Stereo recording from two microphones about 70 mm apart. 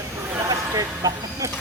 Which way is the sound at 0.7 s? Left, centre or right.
Right.